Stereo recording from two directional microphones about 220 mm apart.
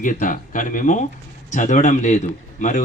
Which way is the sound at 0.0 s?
35° left (ahead or behind).